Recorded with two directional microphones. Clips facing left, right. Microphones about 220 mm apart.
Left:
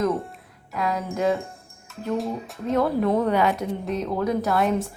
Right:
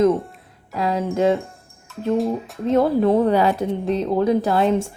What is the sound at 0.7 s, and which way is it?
Speech, 30° right (ahead or behind).